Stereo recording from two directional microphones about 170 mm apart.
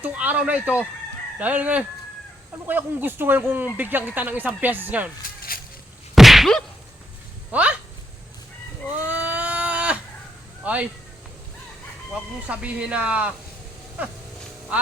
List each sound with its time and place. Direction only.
0.0 s speech: 10° right (ahead or behind)
5.4 s a sound: 60° left (ahead or behind)
6.1 s whack: centre (ahead or behind)
7.5 s speech: 10° right (ahead or behind)
9.0 s a sound: 10° right (ahead or behind)
10.6 s speech: 10° right (ahead or behind)
12.1 s speech: 5° right (ahead or behind)